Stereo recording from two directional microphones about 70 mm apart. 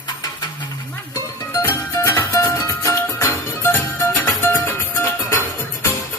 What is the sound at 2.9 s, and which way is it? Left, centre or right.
Music, left.